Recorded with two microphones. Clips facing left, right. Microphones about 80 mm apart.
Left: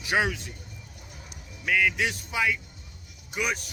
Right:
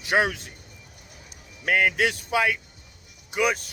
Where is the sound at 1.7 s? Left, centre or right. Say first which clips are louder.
Right 3 dB; right.